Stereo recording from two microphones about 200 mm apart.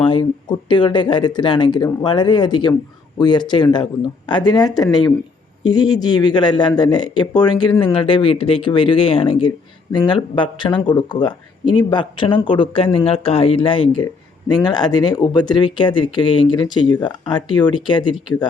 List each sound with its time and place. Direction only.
0.0 s speech: 25° left (ahead or behind)